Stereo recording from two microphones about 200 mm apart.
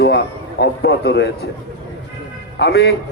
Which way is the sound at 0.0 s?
55° left (ahead or behind).